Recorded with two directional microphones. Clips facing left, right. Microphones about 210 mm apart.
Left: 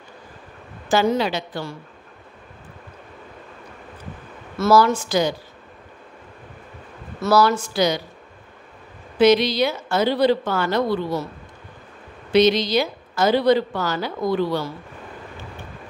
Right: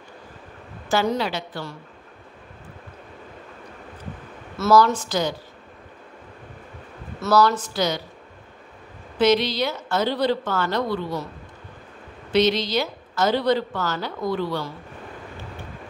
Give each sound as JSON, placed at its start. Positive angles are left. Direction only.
{"t": 0.8, "sound": "a woman's voice", "side_deg": 15}
{"t": 4.6, "sound": "a woman's voice", "side_deg": 10}
{"t": 7.2, "sound": "a woman's voice", "side_deg": 10}
{"t": 9.2, "sound": "a woman's voice", "side_deg": 15}
{"t": 12.3, "sound": "a woman's voice", "side_deg": 15}